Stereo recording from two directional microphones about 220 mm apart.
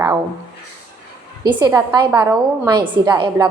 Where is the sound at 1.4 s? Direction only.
15° right (ahead or behind).